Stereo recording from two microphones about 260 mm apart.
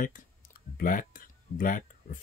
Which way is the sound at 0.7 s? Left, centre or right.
Left.